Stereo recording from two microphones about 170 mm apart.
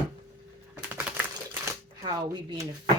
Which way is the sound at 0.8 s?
5° right (ahead or behind).